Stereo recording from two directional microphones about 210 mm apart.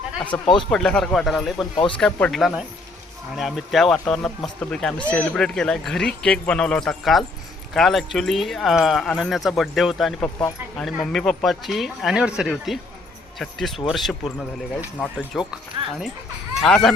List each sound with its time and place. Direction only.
0.3 s speech: 5° left (ahead or behind)
1.7 s speech: 25° left (ahead or behind)
2.0 s speech: 5° left (ahead or behind)
16.6 s speech: 5° left (ahead or behind)